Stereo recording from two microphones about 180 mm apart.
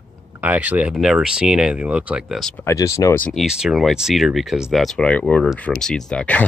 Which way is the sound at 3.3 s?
Centre (ahead or behind).